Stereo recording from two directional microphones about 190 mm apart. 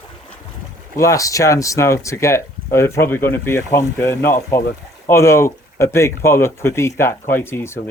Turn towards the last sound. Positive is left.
turn(degrees=15)  # may be behind; listen again after turning